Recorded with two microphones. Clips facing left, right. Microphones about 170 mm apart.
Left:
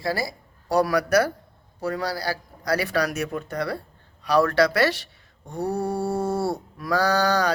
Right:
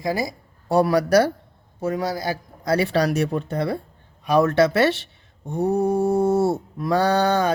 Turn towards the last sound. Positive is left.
turn(degrees=-25)  # may be behind; listen again after turning